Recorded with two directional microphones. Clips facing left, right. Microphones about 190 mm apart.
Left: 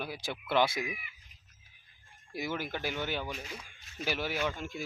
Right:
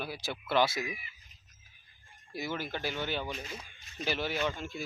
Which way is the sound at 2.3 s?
15° left (ahead or behind).